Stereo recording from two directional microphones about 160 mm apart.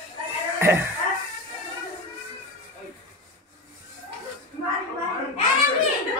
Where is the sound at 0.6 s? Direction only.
15° right (ahead or behind).